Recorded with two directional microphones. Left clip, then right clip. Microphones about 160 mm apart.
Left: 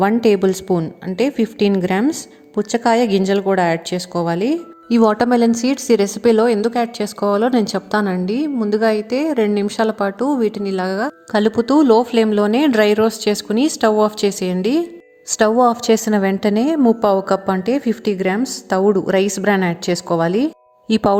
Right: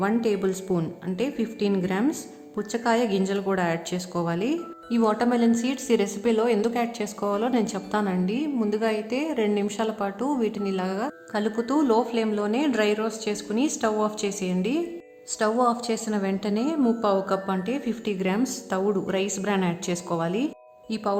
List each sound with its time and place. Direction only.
0.0 s a woman's voice: 45° left (ahead or behind)